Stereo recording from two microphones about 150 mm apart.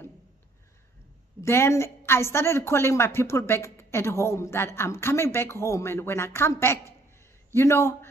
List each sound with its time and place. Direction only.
1.4 s a woman's voice: 15° left (ahead or behind)